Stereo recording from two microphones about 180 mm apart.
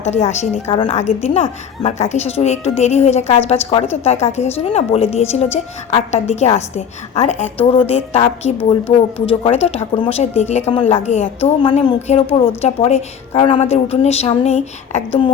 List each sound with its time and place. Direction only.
0.0 s a woman's voice: 40° left (ahead or behind)